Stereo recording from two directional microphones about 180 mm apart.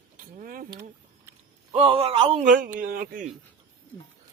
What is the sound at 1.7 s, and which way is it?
Speech, 30° right (ahead or behind).